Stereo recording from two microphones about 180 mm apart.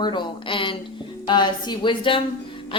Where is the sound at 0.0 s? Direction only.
25° left (ahead or behind).